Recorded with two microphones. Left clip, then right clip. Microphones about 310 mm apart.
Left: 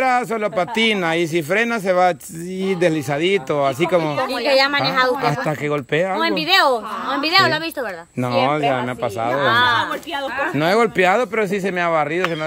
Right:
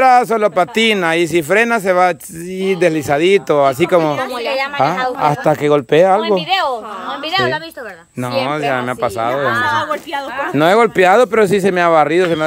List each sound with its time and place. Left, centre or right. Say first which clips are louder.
0.0 s speech: right 8 dB; centre
7.2 s a woman's voice: left 1 dB; left
8.5 s speech: right 2 dB; centre
9.5 s speech: left 3 dB; left
9.8 s speech: right 3 dB; centre